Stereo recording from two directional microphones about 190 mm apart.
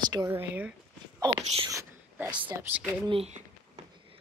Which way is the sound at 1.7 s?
10° right (ahead or behind).